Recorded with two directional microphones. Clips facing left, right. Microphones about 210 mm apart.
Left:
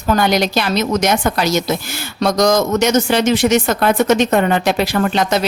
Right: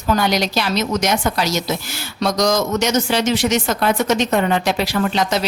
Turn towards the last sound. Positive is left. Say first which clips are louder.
# left 3 dB
turn(degrees=55)  # may be behind; listen again after turning